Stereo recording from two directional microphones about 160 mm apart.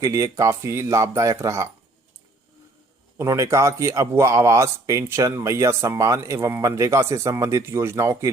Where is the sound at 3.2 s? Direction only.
15° right (ahead or behind).